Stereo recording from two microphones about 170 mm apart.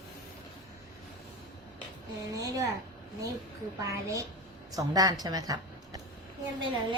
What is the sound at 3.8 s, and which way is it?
A child's voice, 20° right (ahead or behind).